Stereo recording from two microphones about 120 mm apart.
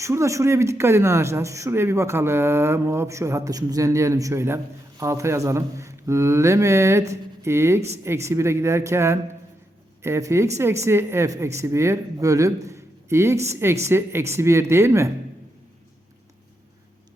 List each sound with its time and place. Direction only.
0.0 s speech: 25° right (ahead or behind)